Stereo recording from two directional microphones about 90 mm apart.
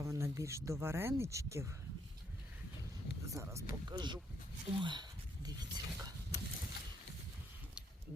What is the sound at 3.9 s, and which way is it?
Speech, 55° right (ahead or behind).